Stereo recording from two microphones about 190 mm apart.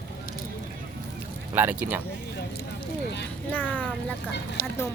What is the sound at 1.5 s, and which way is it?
Speech, 10° right (ahead or behind).